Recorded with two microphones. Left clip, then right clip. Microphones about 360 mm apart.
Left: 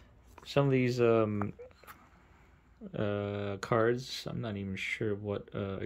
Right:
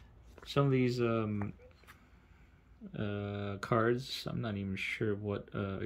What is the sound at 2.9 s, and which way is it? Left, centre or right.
Speech, centre.